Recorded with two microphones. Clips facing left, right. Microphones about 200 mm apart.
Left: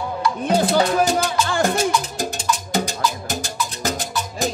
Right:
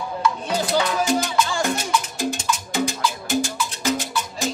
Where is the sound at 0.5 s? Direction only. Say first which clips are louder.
Left 8 dB; 50° left (ahead or behind).